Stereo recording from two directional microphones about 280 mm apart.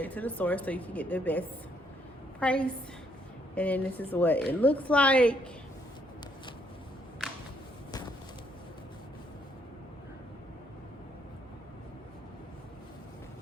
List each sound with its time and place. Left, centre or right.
0.0 s a woman's voice: centre